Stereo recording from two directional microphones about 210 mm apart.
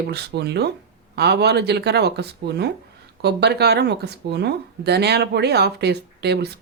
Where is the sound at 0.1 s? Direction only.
50° right (ahead or behind).